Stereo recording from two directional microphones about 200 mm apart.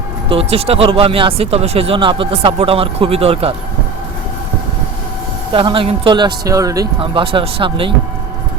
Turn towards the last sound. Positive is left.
turn(degrees=-25)  # may be behind; listen again after turning